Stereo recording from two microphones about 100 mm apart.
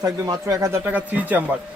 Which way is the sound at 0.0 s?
35° right (ahead or behind).